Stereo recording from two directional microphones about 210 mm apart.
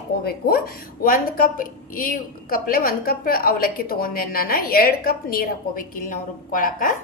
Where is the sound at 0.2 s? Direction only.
45° left (ahead or behind).